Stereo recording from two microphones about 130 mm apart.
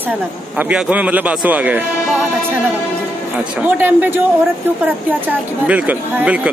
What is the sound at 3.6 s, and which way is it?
Speech, 15° right (ahead or behind).